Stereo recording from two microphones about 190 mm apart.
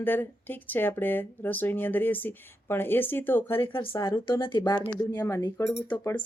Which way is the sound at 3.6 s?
25° left (ahead or behind).